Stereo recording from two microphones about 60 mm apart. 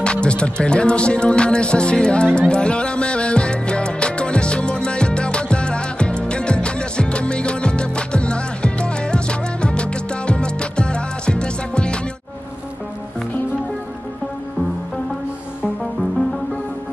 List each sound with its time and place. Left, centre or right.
0.0 s music: centre